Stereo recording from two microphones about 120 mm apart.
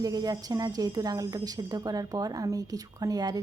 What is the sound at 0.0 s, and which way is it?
Speech, 30° right (ahead or behind).